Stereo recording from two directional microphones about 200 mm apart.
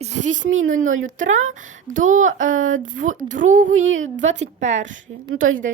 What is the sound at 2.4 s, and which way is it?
Speech, 40° right (ahead or behind).